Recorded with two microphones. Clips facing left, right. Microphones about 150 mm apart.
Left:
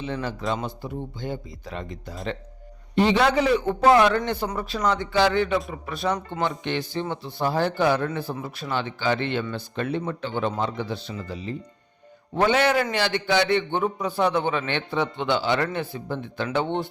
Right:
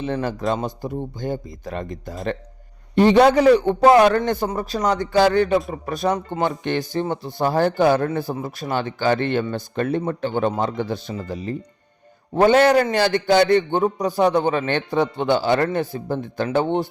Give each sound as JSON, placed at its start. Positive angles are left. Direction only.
{"t": 0.0, "sound": "a man's voice", "side_deg": -50}